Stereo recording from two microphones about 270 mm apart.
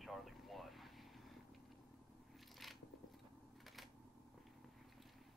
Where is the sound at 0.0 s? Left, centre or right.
Centre.